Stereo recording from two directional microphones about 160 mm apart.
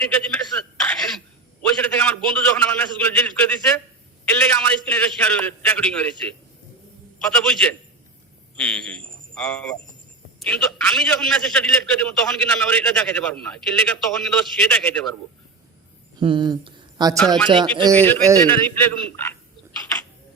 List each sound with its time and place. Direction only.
0.3 s a sound: 10° left (ahead or behind)
1.6 s a man's voice: 10° left (ahead or behind)
7.3 s a man's voice: 5° left (ahead or behind)
16.2 s speech: 30° right (ahead or behind)
17.2 s speech: 5° left (ahead or behind)
17.5 s speech: 30° right (ahead or behind)
17.9 s a man's voice: 10° left (ahead or behind)